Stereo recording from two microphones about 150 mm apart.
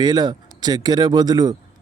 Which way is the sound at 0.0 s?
25° right (ahead or behind).